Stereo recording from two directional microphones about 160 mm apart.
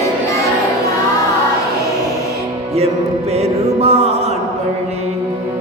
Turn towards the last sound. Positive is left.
turn(degrees=-40)  # may be behind; listen again after turning